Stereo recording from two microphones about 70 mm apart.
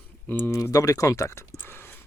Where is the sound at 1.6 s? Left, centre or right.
Left.